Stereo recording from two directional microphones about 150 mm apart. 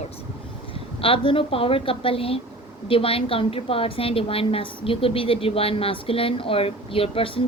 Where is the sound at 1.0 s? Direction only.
35° left (ahead or behind).